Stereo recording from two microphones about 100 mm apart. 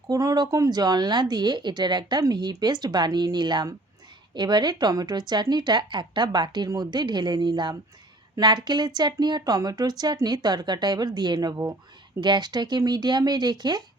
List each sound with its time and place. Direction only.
0.1 s speech: 35° right (ahead or behind)